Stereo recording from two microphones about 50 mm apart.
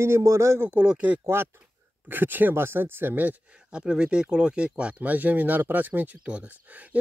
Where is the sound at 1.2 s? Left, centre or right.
Right.